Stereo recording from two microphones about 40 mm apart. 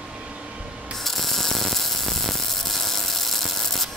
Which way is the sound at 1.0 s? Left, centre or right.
Centre.